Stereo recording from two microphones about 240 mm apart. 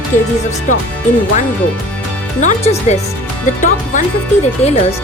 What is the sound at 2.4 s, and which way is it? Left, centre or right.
Speech, left.